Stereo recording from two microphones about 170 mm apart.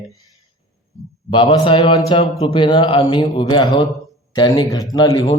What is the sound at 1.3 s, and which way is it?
Speech, 30° left (ahead or behind).